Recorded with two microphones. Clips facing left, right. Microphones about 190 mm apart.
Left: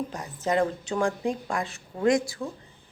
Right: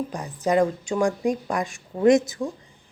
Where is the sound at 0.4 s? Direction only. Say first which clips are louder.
Right 4 dB; 15° right (ahead or behind).